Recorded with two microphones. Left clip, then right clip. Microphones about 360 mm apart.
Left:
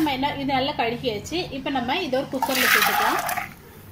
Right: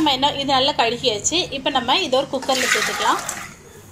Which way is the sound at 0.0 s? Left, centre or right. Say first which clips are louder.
Right 6 dB; right.